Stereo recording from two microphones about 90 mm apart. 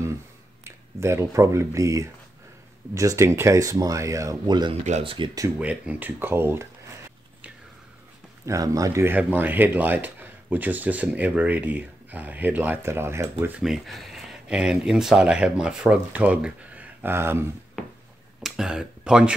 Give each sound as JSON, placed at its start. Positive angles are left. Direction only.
{"t": 0.7, "sound": "speech", "side_deg": -30}
{"t": 4.5, "sound": "speech", "side_deg": -50}
{"t": 5.0, "sound": "speech", "side_deg": -70}
{"t": 5.6, "sound": "speech", "side_deg": -15}
{"t": 8.5, "sound": "speech", "side_deg": -40}
{"t": 9.0, "sound": "speech", "side_deg": -20}
{"t": 13.5, "sound": "speech", "side_deg": -5}
{"t": 18.4, "sound": "speech", "side_deg": -5}